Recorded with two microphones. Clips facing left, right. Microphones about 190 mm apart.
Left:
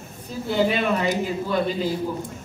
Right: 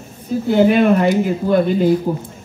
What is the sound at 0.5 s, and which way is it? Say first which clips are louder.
Speech: right 9 dB; 55° right (ahead or behind).